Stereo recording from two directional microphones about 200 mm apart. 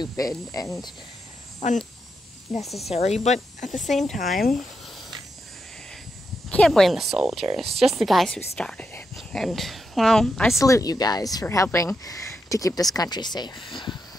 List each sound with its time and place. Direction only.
0.0 s a woman's voice: 15° left (ahead or behind)
1.6 s speech: 35° left (ahead or behind)
2.6 s speech: centre (ahead or behind)
2.9 s speech: 35° left (ahead or behind)
3.7 s speech: centre (ahead or behind)
6.5 s speech: centre (ahead or behind)
10.6 s a woman's voice: 15° left (ahead or behind)